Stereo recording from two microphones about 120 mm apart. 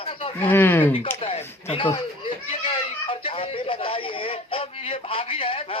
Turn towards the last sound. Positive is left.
turn(degrees=50)  # may be behind; listen again after turning